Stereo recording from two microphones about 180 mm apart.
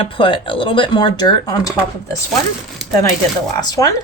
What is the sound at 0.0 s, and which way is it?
Speech, 30° left (ahead or behind).